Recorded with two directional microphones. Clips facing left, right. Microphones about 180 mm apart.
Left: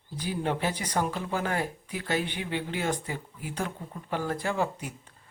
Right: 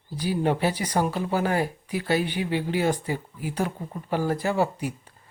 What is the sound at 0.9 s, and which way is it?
Speech, 35° right (ahead or behind).